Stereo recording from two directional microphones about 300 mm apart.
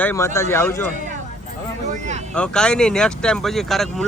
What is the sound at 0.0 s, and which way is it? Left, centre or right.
Speech, centre.